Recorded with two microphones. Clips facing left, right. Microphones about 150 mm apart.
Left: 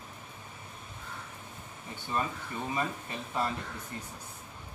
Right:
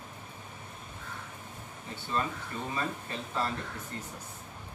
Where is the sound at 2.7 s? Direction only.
15° left (ahead or behind).